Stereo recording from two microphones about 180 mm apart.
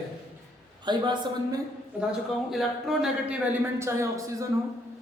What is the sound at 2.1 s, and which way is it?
Speech, centre (ahead or behind).